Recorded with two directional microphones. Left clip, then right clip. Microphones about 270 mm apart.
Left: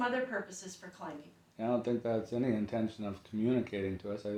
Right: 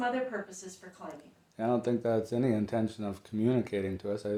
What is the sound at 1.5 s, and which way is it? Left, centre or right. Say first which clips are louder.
Speech: right 3 dB; right.